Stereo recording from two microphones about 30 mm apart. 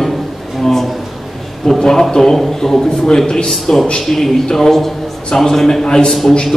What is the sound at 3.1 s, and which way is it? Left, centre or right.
Speech, left.